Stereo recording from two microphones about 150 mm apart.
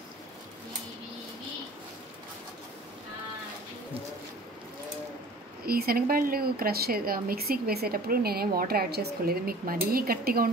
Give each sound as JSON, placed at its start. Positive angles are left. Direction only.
{"t": 5.7, "sound": "speech", "side_deg": -85}